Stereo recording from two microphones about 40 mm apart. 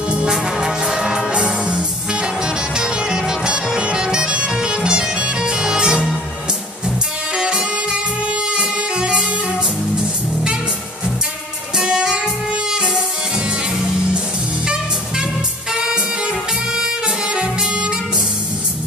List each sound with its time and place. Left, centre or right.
0.3 s music: centre
7.3 s music: right
11.7 s music: right
15.7 s music: centre